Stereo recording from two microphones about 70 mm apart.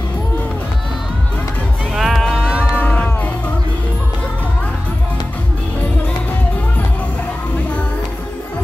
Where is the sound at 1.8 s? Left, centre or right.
Centre.